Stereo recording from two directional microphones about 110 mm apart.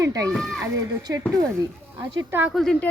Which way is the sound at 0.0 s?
30° right (ahead or behind).